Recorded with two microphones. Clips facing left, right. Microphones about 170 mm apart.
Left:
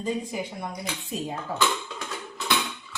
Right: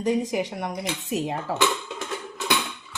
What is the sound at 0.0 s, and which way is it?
Speech, 80° right.